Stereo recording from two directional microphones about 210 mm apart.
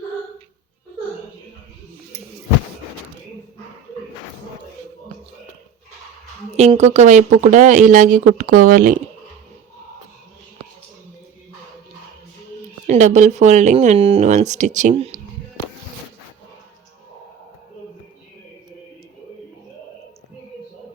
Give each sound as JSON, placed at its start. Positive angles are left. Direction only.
{"t": 6.6, "sound": "speech", "side_deg": -30}
{"t": 12.9, "sound": "speech", "side_deg": -35}